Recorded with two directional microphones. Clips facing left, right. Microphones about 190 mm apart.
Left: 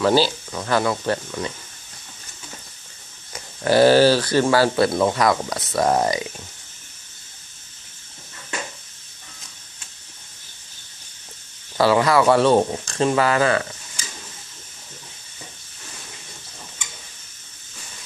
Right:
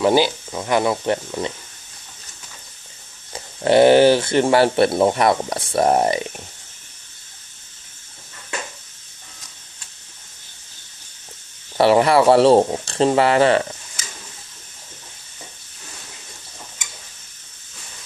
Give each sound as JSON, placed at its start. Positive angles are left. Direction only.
{"t": 0.0, "sound": "speech", "side_deg": -20}
{"t": 3.3, "sound": "speech", "side_deg": -25}
{"t": 11.7, "sound": "speech", "side_deg": -25}